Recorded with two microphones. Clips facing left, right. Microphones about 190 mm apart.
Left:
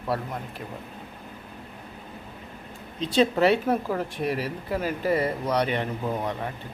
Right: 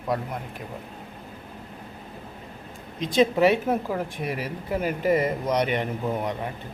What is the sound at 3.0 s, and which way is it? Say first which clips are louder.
Speech: right 1 dB; 10° right (ahead or behind).